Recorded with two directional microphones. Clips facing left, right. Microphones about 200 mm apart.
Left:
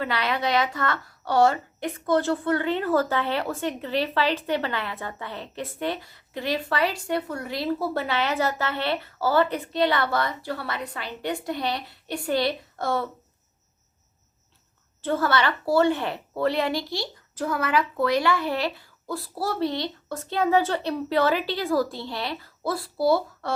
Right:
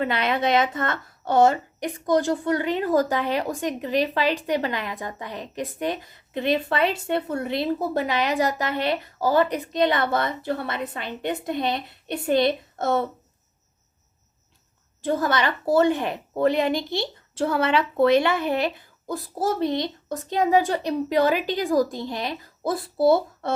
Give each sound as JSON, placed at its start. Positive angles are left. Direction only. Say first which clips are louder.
{"t": 0.0, "sound": "a woman's voice", "louder": "right 3 dB", "side_deg": -20}
{"t": 15.0, "sound": "a woman's voice", "louder": "right 1 dB", "side_deg": -15}